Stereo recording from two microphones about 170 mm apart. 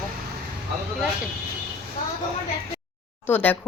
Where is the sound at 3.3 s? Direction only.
10° left (ahead or behind).